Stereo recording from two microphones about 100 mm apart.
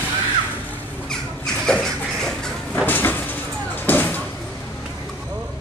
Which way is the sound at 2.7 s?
20° left (ahead or behind).